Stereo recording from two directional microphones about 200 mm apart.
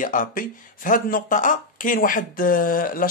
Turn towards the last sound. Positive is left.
turn(degrees=45)  # may be behind; listen again after turning